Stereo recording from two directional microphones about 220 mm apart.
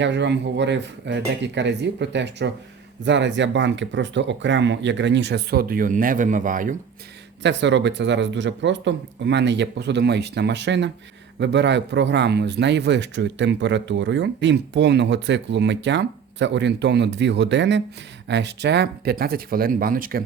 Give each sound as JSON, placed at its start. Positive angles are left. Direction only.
{"t": 0.0, "sound": "a man's voice", "side_deg": -50}
{"t": 7.4, "sound": "a man's voice", "side_deg": -55}